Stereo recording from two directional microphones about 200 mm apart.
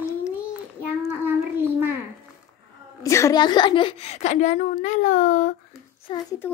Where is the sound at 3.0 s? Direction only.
15° left (ahead or behind); by 5.5 s 40° left (ahead or behind).